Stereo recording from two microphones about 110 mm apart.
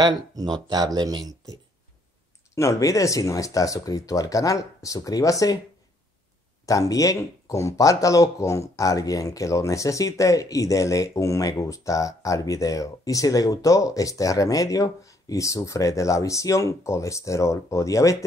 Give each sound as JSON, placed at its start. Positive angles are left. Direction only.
{"t": 0.0, "sound": "speech", "side_deg": -40}
{"t": 2.5, "sound": "speech", "side_deg": 25}
{"t": 6.6, "sound": "speech", "side_deg": 30}